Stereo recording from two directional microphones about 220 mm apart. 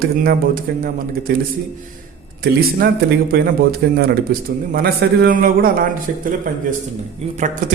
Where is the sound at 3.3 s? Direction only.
45° right (ahead or behind).